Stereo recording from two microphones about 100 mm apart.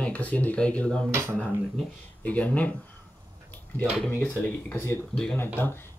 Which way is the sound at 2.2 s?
15° left (ahead or behind).